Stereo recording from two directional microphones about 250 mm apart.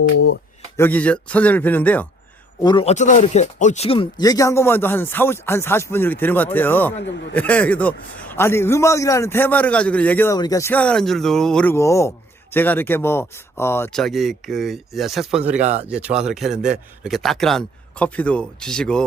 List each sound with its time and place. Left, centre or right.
0.8 s speech: centre
2.6 s a man's voice: left; by 15.6 s centre
15.6 s speech: right
15.9 s speech: centre